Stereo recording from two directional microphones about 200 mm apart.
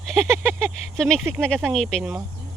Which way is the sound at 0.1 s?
5° left (ahead or behind).